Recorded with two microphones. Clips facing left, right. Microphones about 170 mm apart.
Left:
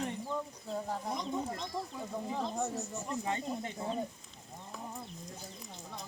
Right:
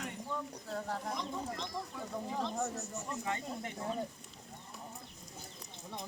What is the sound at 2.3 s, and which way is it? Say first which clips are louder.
Speech: left 1 dB; 5° left (ahead or behind).